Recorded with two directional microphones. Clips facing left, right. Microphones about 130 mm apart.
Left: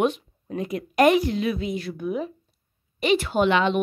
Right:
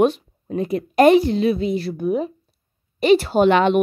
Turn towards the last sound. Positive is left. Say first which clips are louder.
# right 5 dB
turn(degrees=-55)  # may be behind; listen again after turning